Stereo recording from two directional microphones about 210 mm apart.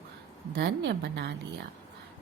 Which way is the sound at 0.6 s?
55° right (ahead or behind).